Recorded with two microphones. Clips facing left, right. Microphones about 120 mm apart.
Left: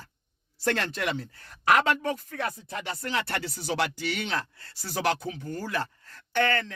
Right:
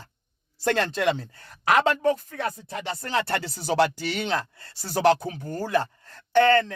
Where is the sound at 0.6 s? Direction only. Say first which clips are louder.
Right 5 dB; 25° right (ahead or behind).